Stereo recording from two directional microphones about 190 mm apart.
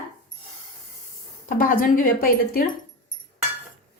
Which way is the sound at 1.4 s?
45° left (ahead or behind).